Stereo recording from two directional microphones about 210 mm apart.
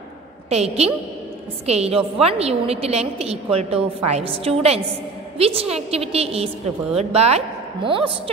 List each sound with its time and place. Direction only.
0.5 s a woman's voice: 30° right (ahead or behind)